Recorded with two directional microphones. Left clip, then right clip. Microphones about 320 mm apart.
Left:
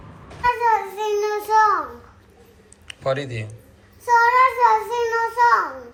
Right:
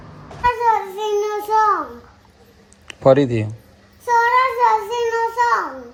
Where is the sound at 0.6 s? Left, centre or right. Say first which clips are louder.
Right 2 dB; right.